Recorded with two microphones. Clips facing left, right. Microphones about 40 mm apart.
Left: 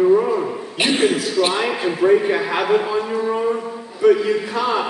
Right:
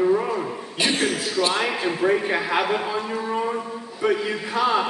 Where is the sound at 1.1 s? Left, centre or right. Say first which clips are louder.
Left 4 dB; centre.